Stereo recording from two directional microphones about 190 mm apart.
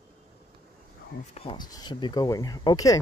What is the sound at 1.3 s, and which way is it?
Speech, 30° left (ahead or behind).